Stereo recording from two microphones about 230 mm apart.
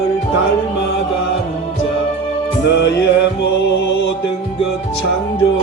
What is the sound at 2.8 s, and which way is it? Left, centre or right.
Music, left.